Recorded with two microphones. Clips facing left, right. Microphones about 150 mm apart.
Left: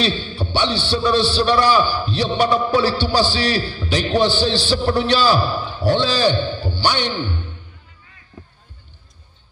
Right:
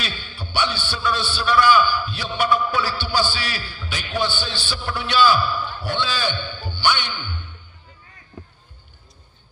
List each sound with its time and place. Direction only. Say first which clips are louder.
0.0 s a man's voice: left 11 dB; 30° left (ahead or behind)